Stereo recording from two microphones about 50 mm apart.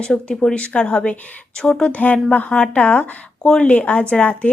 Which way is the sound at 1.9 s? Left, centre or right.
Left.